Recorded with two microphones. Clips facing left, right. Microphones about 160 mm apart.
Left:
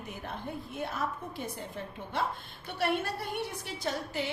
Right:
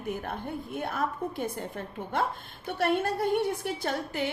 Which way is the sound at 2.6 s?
50° right (ahead or behind).